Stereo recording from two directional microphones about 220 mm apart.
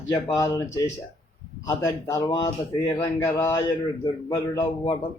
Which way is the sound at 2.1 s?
20° left (ahead or behind).